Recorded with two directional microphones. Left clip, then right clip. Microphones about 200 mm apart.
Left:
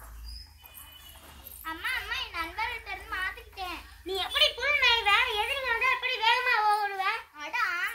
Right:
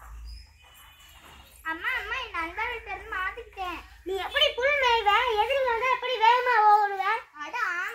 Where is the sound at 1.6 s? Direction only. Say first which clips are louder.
Right 3 dB; 30° left (ahead or behind).